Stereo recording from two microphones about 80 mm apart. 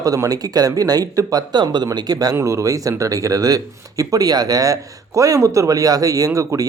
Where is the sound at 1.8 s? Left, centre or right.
Right.